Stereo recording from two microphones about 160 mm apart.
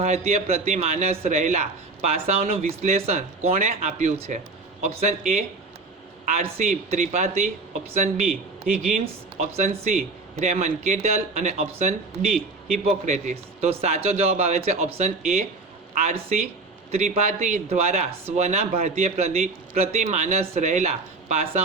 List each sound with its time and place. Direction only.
0.0 s a man's voice: 45° right (ahead or behind)
9.4 s a man's voice: 50° right (ahead or behind)